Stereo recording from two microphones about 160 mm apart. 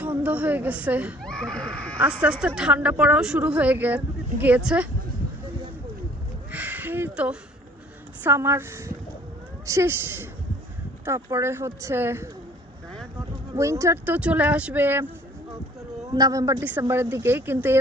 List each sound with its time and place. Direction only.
0.0 s a woman's voice: 10° right (ahead or behind)
1.2 s speech: 5° left (ahead or behind)
2.0 s a woman's voice: 10° right (ahead or behind)
6.5 s a sound: 10° right (ahead or behind)
8.2 s a woman's voice: 15° right (ahead or behind)
13.5 s a woman's voice: 20° right (ahead or behind)
16.0 s a man's voice: 25° right (ahead or behind)